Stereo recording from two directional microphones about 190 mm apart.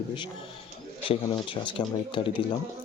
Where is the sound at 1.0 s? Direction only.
30° left (ahead or behind).